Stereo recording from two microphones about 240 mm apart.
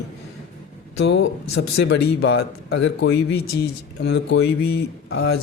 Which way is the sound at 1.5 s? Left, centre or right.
Left.